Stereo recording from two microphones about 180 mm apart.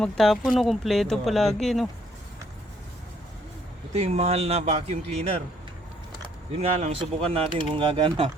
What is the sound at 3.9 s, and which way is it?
Speech, 35° right (ahead or behind).